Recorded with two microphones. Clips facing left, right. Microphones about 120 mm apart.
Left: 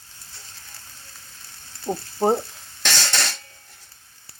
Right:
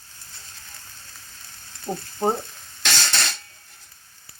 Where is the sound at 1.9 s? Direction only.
30° left (ahead or behind).